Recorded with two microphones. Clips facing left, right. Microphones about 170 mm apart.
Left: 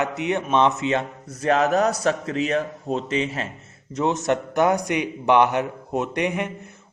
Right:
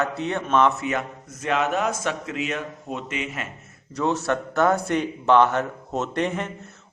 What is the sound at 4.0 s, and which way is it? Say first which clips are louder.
A man's voice: left 2 dB; 20° left (ahead or behind).